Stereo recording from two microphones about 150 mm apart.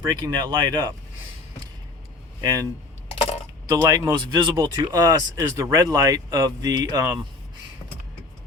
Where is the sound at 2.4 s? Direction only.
25° right (ahead or behind).